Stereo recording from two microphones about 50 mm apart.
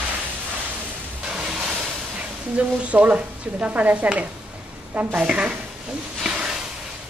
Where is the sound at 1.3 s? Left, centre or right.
Centre.